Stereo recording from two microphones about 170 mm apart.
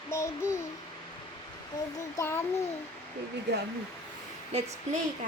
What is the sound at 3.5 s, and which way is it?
Speech, 75° right (ahead or behind).